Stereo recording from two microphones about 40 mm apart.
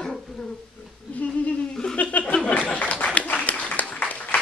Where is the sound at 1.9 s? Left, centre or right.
Left.